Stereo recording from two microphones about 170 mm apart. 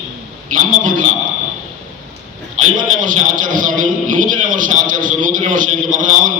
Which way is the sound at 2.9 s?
50° right (ahead or behind).